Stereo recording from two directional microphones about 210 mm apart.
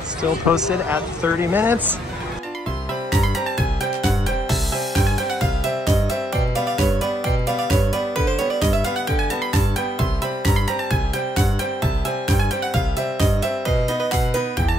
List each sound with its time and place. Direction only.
0.2 s speech: 5° right (ahead or behind)
8.4 s music: centre (ahead or behind)
13.9 s music: centre (ahead or behind)